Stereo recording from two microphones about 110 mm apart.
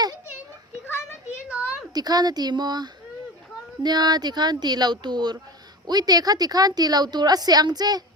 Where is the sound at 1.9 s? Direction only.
35° right (ahead or behind).